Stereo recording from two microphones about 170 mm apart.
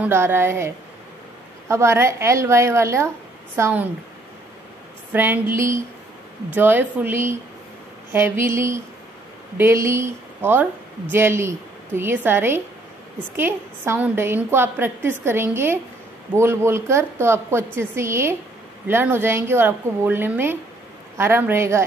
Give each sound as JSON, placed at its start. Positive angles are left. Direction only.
{"t": 0.0, "sound": "a woman's voice", "side_deg": -15}
{"t": 5.1, "sound": "a woman's voice", "side_deg": -10}